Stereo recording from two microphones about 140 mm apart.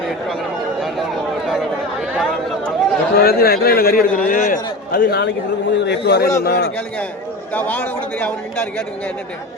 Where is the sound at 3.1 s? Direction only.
90° left; by 4.6 s 70° left (ahead or behind).